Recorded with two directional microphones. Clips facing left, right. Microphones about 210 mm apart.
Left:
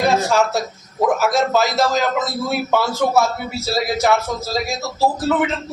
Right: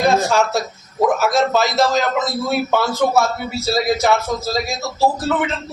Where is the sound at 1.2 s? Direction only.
Centre (ahead or behind).